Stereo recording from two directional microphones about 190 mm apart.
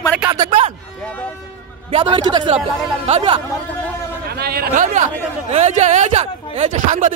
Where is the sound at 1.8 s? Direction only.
25° right (ahead or behind).